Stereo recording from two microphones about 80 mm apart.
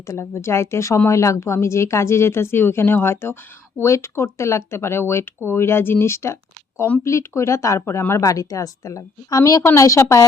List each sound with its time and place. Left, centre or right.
0.0 s a woman's voice: left